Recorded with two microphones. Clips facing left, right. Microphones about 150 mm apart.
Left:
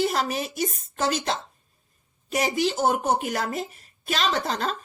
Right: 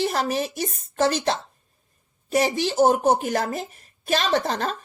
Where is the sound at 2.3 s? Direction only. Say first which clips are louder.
Right 2 dB; 45° right (ahead or behind).